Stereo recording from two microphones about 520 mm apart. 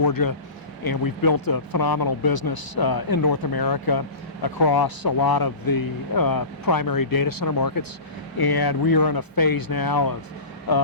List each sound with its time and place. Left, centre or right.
0.0 s speech: left